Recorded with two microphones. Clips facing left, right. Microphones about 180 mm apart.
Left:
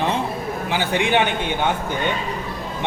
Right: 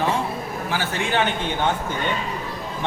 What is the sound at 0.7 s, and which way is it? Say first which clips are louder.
Speech: left 5 dB; 15° left (ahead or behind).